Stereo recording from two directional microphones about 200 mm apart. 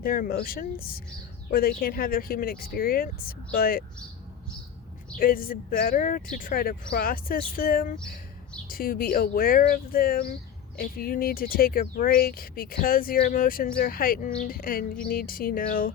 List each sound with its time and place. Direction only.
0.0 s speech: 45° left (ahead or behind)
5.1 s speech: 45° left (ahead or behind)